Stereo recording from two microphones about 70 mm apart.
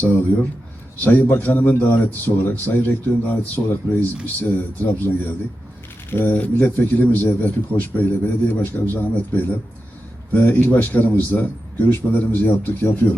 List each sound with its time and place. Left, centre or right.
0.0 s a man's voice: left